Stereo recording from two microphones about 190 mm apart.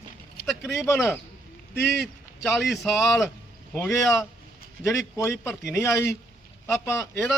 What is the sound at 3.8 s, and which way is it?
Speech, 15° left (ahead or behind).